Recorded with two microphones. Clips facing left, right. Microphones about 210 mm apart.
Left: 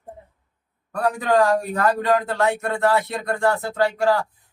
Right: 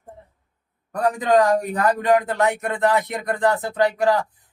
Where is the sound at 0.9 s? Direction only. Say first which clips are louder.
Right 1 dB; 20° right (ahead or behind).